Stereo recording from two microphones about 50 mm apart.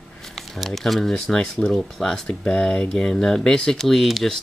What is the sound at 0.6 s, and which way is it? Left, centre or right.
Speech, centre.